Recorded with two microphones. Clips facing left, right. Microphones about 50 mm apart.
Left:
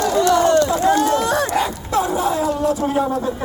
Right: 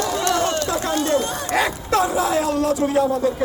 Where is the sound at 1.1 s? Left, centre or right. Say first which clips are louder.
Left 4 dB; left.